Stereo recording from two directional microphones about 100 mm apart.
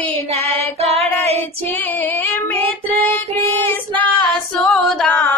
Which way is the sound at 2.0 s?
20° left (ahead or behind).